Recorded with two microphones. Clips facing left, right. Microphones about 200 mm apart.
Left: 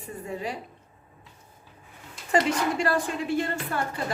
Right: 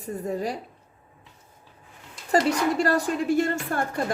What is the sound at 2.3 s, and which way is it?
A woman's voice, 40° right (ahead or behind).